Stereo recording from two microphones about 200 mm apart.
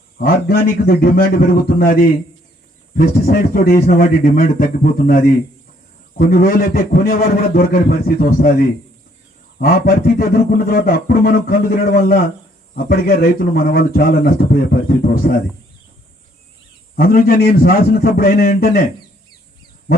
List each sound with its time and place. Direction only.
0.2 s speech: 50° left (ahead or behind)
16.9 s speech: 45° left (ahead or behind)